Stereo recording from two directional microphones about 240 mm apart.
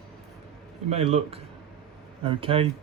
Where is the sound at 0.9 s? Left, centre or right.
Right.